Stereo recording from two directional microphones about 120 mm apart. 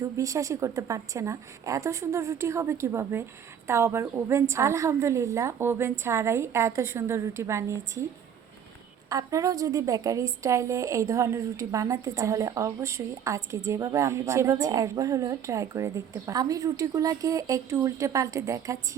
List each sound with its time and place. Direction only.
0.0 s a woman's voice: 25° right (ahead or behind)
9.0 s a woman's voice: 30° right (ahead or behind)